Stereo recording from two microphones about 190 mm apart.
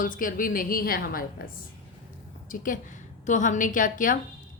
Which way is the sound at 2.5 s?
45° left (ahead or behind).